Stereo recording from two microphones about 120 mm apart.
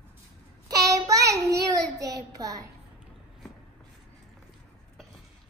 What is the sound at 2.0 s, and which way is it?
Speech, 30° right (ahead or behind).